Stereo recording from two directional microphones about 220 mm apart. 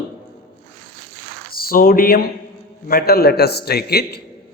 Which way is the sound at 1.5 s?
40° left (ahead or behind).